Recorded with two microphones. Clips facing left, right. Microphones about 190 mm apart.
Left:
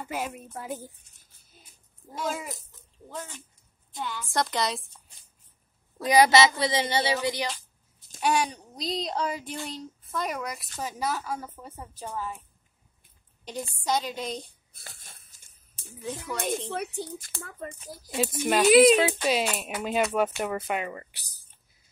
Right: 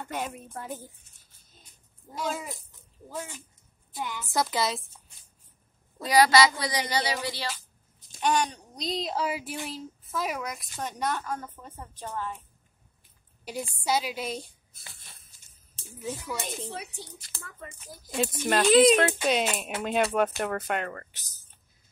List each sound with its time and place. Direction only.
0.0 s speech: 5° left (ahead or behind)
2.1 s a woman's voice: centre (ahead or behind)
4.3 s speech: 5° right (ahead or behind)
6.0 s speech: 20° left (ahead or behind)
8.2 s a woman's voice: 10° left (ahead or behind)
13.5 s a woman's voice: 10° right (ahead or behind)
14.9 s a sound: 45° left (ahead or behind)
16.3 s speech: 55° left (ahead or behind); by 17.9 s 35° left (ahead or behind)
18.1 s a woman's voice: 5° left (ahead or behind)